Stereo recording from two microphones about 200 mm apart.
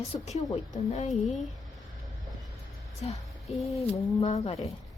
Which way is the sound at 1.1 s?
Centre (ahead or behind).